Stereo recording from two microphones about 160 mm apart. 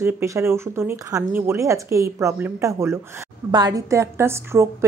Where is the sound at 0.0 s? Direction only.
15° right (ahead or behind).